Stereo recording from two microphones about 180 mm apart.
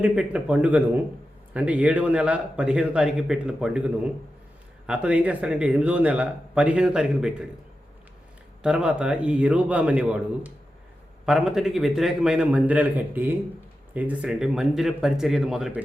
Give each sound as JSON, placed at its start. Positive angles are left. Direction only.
{"t": 0.0, "sound": "a man's voice", "side_deg": -5}
{"t": 8.6, "sound": "a man's voice", "side_deg": -5}